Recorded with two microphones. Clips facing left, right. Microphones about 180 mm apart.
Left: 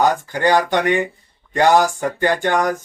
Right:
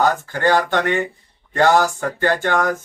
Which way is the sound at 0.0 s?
15° left (ahead or behind).